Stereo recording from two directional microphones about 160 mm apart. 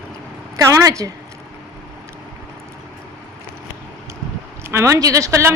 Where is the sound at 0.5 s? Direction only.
20° right (ahead or behind).